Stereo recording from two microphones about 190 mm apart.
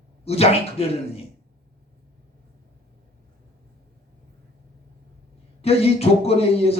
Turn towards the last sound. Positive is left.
turn(degrees=35)  # may be behind; listen again after turning